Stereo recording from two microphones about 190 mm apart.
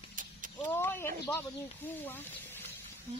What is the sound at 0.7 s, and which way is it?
Snake, 10° left (ahead or behind).